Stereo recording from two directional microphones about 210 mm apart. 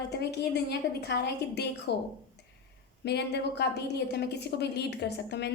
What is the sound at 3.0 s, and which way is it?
A woman's voice, 50° left (ahead or behind).